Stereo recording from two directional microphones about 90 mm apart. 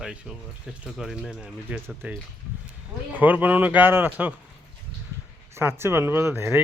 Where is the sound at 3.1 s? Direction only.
20° right (ahead or behind).